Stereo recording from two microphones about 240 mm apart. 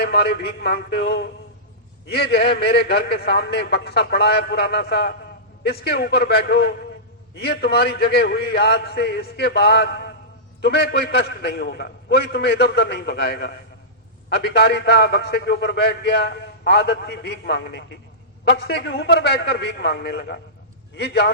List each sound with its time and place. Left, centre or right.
0.0 s a man's voice: left